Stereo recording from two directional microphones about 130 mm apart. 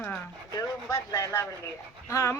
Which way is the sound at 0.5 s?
25° left (ahead or behind).